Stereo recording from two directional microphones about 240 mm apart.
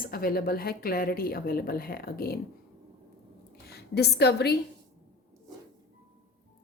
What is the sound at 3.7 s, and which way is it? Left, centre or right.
Speech, left.